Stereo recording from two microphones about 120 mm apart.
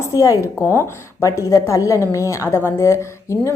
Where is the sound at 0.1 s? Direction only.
25° left (ahead or behind).